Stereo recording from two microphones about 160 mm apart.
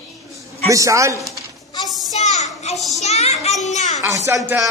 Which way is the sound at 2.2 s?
45° left (ahead or behind).